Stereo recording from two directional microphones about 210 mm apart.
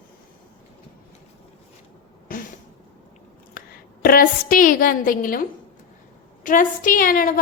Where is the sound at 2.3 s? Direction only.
40° left (ahead or behind).